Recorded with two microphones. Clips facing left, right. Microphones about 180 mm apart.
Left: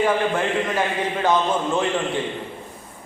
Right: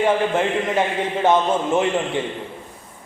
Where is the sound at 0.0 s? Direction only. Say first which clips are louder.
Right 2 dB; 20° right (ahead or behind).